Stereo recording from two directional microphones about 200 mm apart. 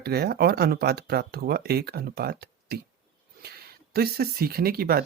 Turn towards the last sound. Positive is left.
turn(degrees=-50)  # may be behind; listen again after turning